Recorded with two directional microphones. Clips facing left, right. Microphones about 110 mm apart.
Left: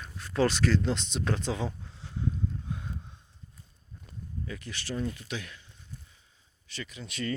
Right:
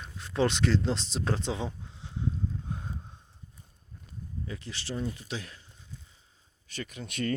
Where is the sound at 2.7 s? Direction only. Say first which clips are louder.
Even; 40° right (ahead or behind).